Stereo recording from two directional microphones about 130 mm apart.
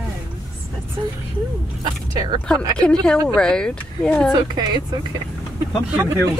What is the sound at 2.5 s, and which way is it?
Speech, 5° left (ahead or behind).